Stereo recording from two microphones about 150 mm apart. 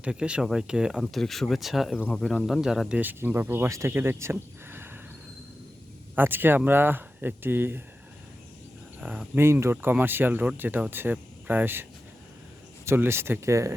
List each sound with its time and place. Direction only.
0.0 s speech: 5° right (ahead or behind)
3.0 s speech: 10° right (ahead or behind)
6.1 s speech: 15° right (ahead or behind)
9.0 s speech: 10° right (ahead or behind)